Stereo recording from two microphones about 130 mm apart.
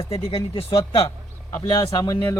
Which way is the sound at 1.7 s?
25° left (ahead or behind).